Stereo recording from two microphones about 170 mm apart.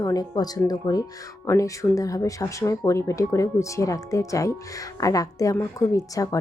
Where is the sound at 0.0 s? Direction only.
20° left (ahead or behind).